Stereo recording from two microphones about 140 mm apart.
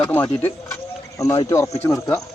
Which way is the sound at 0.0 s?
15° left (ahead or behind).